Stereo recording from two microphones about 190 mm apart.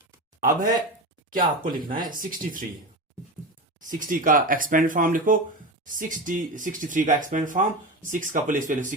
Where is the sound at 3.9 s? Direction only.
45° right (ahead or behind).